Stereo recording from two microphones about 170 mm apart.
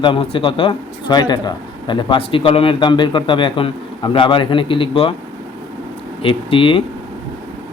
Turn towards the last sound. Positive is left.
turn(degrees=30)  # may be behind; listen again after turning